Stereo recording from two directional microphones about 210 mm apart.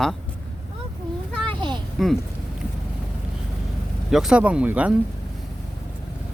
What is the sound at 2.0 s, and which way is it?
Speech, centre (ahead or behind).